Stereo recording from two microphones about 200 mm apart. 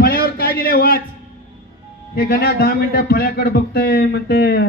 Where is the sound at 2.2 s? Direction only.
50° left (ahead or behind).